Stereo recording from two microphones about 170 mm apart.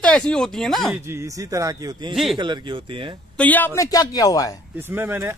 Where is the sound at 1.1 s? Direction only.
15° right (ahead or behind).